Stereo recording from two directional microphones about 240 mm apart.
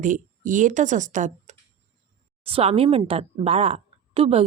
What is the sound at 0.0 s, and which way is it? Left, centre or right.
A woman's voice, right.